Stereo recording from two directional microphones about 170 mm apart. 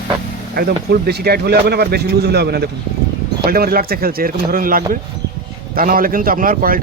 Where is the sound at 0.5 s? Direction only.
65° right (ahead or behind).